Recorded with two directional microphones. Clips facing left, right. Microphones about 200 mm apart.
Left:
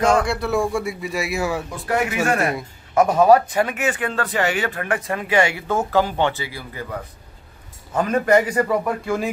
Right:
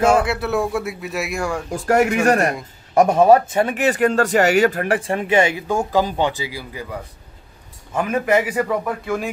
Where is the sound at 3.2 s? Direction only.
25° right (ahead or behind).